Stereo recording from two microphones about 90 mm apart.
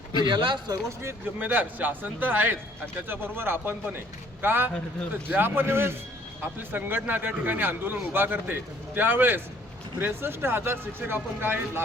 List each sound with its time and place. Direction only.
0.3 s speech: 60° right (ahead or behind)
0.7 s speech: 35° right (ahead or behind)
1.4 s speech: 20° right (ahead or behind)